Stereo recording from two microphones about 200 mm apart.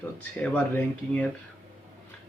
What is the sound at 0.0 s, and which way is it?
Speech, 10° left (ahead or behind).